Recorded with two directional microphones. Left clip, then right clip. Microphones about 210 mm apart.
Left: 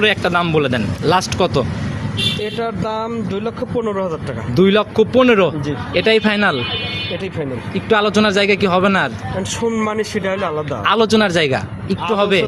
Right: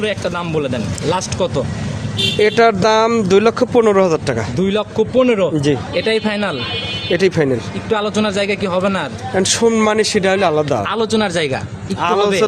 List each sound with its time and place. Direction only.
0.0 s speech: 25° left (ahead or behind)
2.4 s speech: 60° right (ahead or behind)
4.5 s a man's voice: 15° left (ahead or behind)
7.2 s speech: 55° right (ahead or behind)
7.9 s a man's voice: 15° left (ahead or behind)
9.6 s a man's voice: 40° right (ahead or behind)
10.8 s a man's voice: 15° left (ahead or behind)